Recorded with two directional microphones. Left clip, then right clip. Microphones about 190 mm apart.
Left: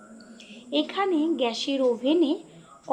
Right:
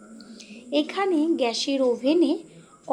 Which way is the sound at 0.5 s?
20° right (ahead or behind).